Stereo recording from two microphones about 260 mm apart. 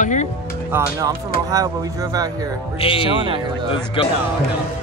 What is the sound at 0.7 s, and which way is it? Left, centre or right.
Speech, centre.